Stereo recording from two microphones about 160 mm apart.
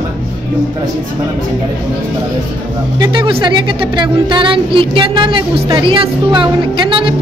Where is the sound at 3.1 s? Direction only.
30° right (ahead or behind).